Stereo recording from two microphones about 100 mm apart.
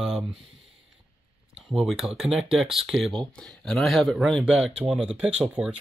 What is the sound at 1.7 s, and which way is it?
Speech, 5° right (ahead or behind).